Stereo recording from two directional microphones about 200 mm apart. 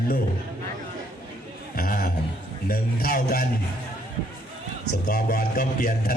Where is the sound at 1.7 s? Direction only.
45° left (ahead or behind).